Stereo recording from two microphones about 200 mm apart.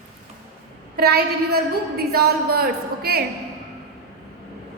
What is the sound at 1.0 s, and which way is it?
A woman's voice, 50° right (ahead or behind).